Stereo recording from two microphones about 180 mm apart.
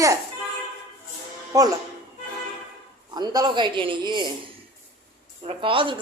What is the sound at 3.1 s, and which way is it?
A woman's voice, 20° right (ahead or behind).